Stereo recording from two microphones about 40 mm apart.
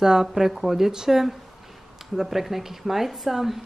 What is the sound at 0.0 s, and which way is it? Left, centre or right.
A woman's voice, centre.